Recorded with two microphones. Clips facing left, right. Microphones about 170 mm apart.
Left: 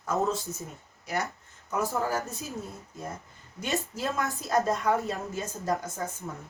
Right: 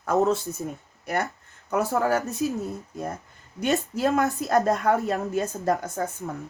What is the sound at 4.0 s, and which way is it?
A woman's voice, 65° right (ahead or behind).